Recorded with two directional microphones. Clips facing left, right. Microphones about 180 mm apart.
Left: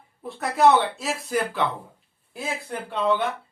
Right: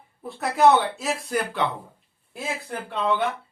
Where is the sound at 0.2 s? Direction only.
Centre (ahead or behind).